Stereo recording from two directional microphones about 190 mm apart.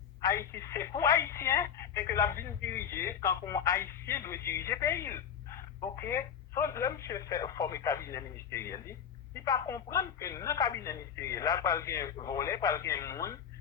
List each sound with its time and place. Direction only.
0.2 s speech: 15° left (ahead or behind)